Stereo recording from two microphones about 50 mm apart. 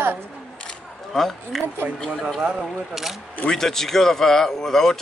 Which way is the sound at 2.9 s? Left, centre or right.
Centre.